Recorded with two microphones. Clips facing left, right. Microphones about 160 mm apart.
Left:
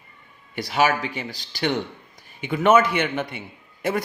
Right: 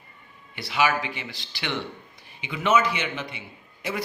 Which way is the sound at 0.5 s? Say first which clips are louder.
Left 3 dB; 45° left (ahead or behind).